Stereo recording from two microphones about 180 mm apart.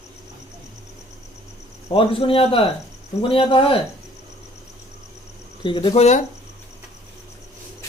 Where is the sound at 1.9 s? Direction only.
30° left (ahead or behind).